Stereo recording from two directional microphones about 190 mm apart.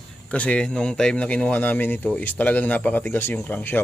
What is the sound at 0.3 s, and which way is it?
Speech, 5° left (ahead or behind).